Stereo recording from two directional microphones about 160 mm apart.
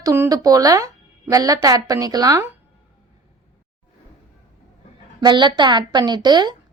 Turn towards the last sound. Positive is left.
turn(degrees=-25)  # may be behind; listen again after turning